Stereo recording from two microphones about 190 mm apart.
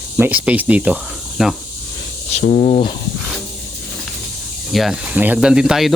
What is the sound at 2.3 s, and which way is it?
Speech, 35° left (ahead or behind).